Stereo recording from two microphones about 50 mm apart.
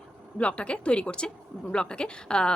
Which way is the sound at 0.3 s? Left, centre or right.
Left.